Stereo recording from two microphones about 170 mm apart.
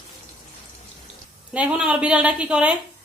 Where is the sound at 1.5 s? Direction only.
5° right (ahead or behind).